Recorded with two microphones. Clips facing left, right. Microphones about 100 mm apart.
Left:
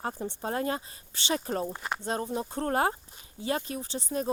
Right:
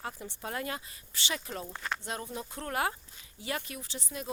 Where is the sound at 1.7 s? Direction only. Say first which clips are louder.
Left 3 dB; 15° left (ahead or behind).